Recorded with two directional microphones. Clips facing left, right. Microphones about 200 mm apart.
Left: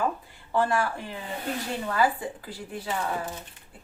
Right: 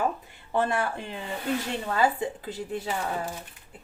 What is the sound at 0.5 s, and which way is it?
Speech, 20° right (ahead or behind).